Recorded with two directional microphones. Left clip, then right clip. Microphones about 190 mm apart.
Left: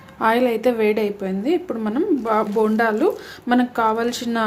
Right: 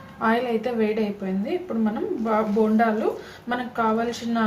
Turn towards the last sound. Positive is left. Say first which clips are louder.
# left 3 dB
turn(degrees=60)  # may be behind; listen again after turning